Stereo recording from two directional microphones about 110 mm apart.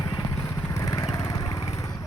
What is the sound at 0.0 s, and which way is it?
Vehicle, 40° left (ahead or behind).